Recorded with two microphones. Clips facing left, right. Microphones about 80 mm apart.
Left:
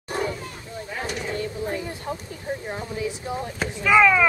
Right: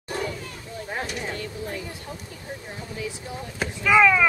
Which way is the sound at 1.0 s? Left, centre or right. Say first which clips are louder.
Left 3 dB; left.